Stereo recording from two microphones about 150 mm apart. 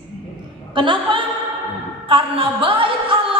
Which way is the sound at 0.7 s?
35° right (ahead or behind).